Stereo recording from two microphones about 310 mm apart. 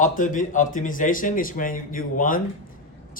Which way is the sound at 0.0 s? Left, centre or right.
Left.